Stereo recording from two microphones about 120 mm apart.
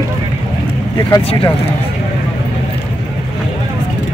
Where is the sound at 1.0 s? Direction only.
35° left (ahead or behind).